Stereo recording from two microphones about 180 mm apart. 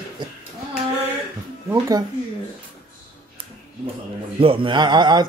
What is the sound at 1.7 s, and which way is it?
Speech, 20° right (ahead or behind).